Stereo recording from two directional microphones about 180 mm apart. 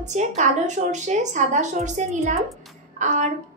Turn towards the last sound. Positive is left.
turn(degrees=-45)  # may be behind; listen again after turning